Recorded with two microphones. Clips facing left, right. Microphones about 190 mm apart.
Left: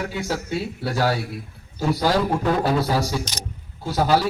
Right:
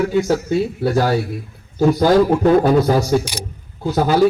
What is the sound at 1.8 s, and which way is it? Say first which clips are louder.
A man's voice: right 8 dB; 50° right (ahead or behind).